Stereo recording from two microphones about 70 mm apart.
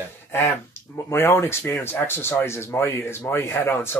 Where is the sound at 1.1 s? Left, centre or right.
Left.